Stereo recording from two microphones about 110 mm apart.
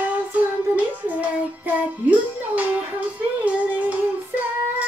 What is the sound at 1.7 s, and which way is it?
Child singing, 15° right (ahead or behind).